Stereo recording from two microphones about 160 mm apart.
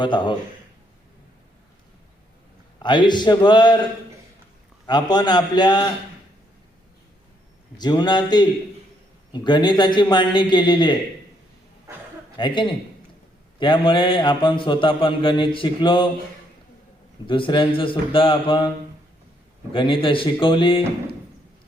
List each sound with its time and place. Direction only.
0.0 s a man's voice: 30° left (ahead or behind)
2.7 s a man's voice: 30° left (ahead or behind)
4.9 s a man's voice: 25° left (ahead or behind)
7.8 s a man's voice: 25° left (ahead or behind)
12.4 s a man's voice: 30° left (ahead or behind)
17.2 s a man's voice: 30° left (ahead or behind)
19.7 s a man's voice: 35° left (ahead or behind)